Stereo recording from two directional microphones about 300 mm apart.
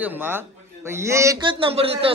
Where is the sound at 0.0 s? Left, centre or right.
Centre.